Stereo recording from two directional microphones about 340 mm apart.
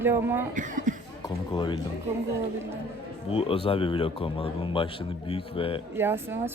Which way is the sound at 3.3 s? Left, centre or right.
Centre.